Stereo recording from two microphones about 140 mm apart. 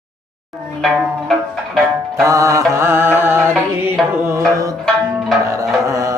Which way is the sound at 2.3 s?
20° right (ahead or behind).